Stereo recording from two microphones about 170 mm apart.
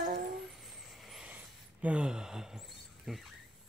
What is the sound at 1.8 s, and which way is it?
A woman's voice, 5° right (ahead or behind).